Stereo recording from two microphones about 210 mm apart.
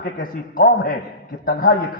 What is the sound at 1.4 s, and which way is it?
Speech, 45° left (ahead or behind).